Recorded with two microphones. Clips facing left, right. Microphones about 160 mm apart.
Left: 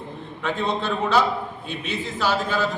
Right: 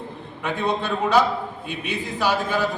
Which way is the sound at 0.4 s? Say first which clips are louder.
Even; 15° right (ahead or behind).